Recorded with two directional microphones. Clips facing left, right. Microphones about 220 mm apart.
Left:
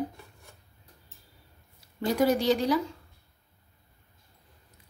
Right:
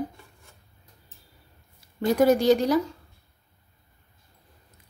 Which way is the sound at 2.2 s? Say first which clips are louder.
Right 5 dB; 50° right (ahead or behind).